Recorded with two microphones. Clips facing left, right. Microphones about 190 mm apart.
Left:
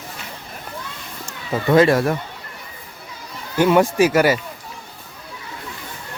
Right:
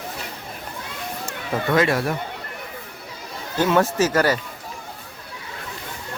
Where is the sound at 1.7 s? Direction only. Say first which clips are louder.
Left 6 dB; 30° left (ahead or behind).